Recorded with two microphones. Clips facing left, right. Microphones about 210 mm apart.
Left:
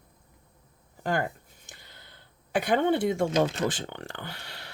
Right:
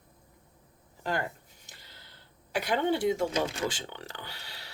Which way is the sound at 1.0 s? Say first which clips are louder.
Left 4 dB; 50° left (ahead or behind).